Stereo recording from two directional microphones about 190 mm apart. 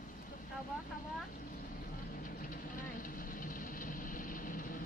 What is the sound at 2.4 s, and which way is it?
Vehicle, 45° left (ahead or behind).